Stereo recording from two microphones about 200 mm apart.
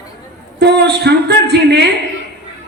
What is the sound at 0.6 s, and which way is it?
Speech, 55° right (ahead or behind).